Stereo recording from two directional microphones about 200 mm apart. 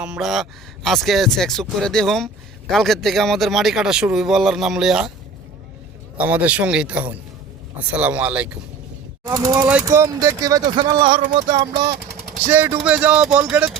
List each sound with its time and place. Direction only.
0.0 s speech: 5° right (ahead or behind)
6.1 s speech: 10° right (ahead or behind)
9.2 s speech: 15° right (ahead or behind)
11.2 s a sound: 35° right (ahead or behind)
12.5 s speech: 10° right (ahead or behind)